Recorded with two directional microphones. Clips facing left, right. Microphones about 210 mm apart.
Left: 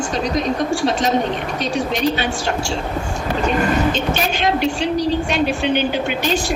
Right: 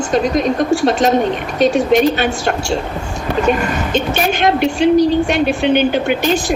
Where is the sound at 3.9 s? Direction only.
55° right (ahead or behind).